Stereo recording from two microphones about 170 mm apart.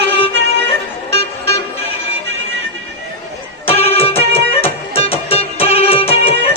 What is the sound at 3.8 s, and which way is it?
Music, 35° left (ahead or behind).